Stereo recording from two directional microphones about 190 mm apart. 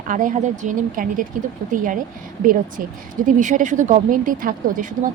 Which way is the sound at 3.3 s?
40° right (ahead or behind).